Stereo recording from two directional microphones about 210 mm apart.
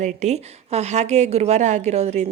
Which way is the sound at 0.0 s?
35° right (ahead or behind).